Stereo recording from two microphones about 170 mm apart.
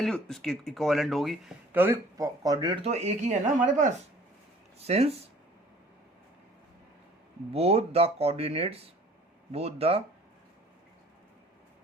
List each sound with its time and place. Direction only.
0.0 s speech: 5° left (ahead or behind)
1.7 s speech: 10° right (ahead or behind)
2.8 s speech: 40° right (ahead or behind)
7.5 s speech: 35° right (ahead or behind)